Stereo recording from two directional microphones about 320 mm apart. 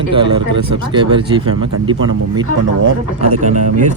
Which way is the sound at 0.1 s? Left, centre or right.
Centre.